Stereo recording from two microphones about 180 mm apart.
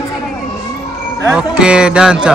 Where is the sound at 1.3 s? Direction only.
5° right (ahead or behind).